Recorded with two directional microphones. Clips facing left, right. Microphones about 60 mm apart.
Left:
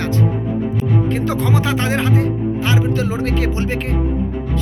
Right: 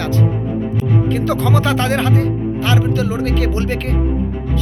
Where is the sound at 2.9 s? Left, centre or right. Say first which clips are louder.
Right 1 dB; left; by 4.0 s centre.